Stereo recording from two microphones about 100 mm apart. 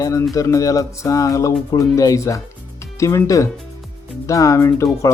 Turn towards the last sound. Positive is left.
turn(degrees=35)  # may be behind; listen again after turning